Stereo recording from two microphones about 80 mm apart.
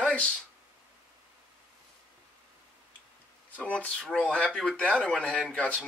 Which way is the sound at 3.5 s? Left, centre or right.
Centre.